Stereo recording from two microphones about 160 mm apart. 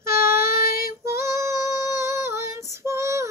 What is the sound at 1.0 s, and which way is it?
Female singing, 15° right (ahead or behind).